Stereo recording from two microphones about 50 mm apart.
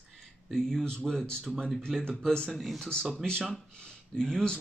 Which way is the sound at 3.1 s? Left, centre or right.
Centre.